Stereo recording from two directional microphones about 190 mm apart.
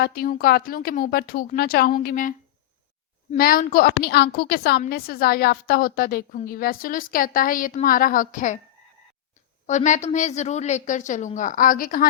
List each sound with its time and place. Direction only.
0.0 s a woman's voice: 50° left (ahead or behind)
3.3 s a woman's voice: 50° left (ahead or behind)
9.6 s a woman's voice: 40° left (ahead or behind)